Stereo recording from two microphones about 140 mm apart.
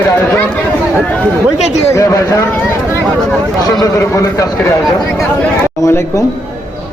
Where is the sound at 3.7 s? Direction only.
25° left (ahead or behind).